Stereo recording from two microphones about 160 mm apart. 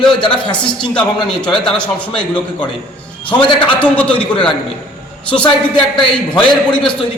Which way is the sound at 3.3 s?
20° left (ahead or behind).